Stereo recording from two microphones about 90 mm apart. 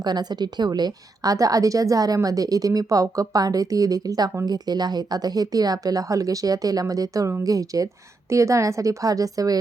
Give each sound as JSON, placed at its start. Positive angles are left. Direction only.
{"t": 0.0, "sound": "a woman's voice", "side_deg": -50}